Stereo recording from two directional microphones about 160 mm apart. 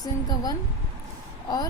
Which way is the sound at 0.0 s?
25° left (ahead or behind).